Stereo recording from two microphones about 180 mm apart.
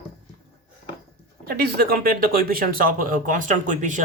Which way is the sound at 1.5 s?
60° right (ahead or behind).